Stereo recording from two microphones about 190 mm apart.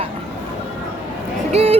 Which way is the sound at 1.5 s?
30° right (ahead or behind).